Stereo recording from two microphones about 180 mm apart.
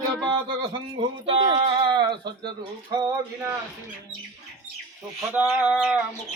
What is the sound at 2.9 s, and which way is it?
Music, 20° right (ahead or behind).